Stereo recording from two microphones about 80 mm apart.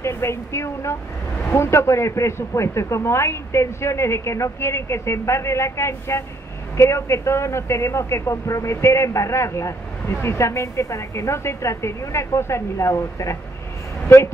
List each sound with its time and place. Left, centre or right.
0.0 s a woman's voice: left